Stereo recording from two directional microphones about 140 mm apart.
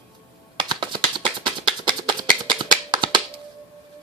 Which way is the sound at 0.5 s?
35° right (ahead or behind).